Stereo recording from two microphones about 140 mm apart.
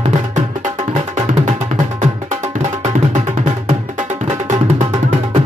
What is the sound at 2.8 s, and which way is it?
Music, 55° right (ahead or behind).